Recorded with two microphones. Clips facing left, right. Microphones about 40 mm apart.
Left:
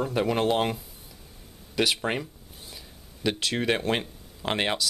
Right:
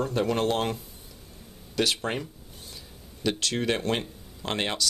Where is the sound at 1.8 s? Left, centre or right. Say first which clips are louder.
Left 1 dB; centre.